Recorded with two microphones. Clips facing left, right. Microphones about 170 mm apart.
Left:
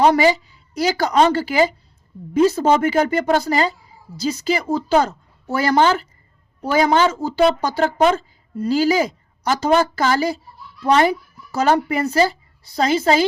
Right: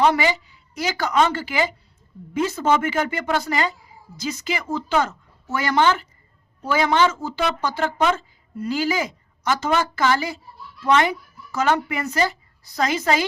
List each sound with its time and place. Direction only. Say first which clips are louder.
0.0 s a woman's voice: left 5 dB; 40° left (ahead or behind)